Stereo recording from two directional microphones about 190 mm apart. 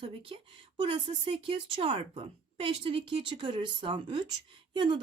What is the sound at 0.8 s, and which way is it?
Speech, 25° right (ahead or behind).